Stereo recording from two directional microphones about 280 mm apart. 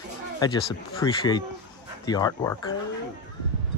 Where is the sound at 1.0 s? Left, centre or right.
Centre.